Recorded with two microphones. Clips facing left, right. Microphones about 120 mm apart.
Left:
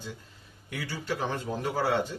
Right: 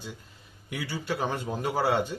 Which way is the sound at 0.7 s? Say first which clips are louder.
Right 1 dB; 15° right (ahead or behind).